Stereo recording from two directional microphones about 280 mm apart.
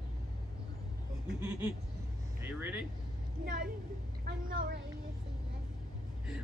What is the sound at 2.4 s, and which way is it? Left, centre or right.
Speech, centre.